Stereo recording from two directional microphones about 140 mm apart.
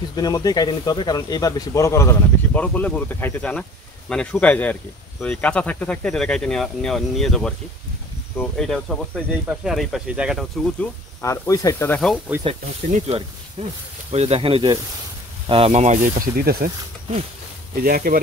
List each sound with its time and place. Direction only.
0.1 s speech: 25° left (ahead or behind); by 10.6 s 5° right (ahead or behind)
11.1 s speech: 20° left (ahead or behind)
12.3 s speech: 10° right (ahead or behind)
12.9 s speech: 50° right (ahead or behind); by 16.7 s 90° right
17.8 s speech: 90° right